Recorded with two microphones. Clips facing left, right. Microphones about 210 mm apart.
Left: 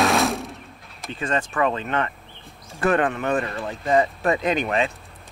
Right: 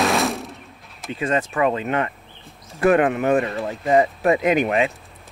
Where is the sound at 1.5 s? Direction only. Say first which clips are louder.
Right 1 dB; 15° right (ahead or behind).